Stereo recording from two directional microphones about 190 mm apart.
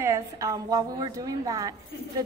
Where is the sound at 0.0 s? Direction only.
15° right (ahead or behind).